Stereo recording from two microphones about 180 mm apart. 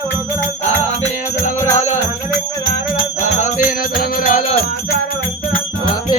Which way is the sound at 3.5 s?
45° left (ahead or behind).